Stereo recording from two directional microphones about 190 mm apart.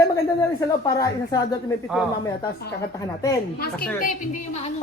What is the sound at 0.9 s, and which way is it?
Speech, 20° left (ahead or behind).